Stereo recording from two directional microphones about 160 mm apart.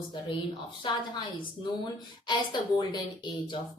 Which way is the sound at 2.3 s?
25° left (ahead or behind).